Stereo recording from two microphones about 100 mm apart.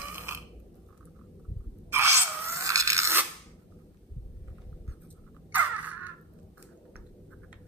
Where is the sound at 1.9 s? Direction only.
25° right (ahead or behind).